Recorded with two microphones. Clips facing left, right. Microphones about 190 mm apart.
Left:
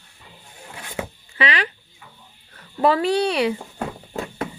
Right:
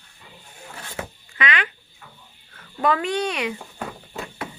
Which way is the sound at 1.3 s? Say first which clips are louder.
Left 2 dB; 35° left (ahead or behind).